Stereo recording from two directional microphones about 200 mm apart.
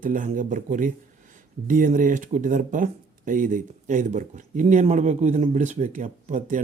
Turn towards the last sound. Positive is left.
turn(degrees=-40)  # may be behind; listen again after turning